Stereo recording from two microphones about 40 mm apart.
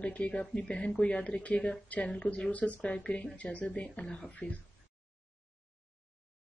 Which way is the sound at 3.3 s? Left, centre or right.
Left.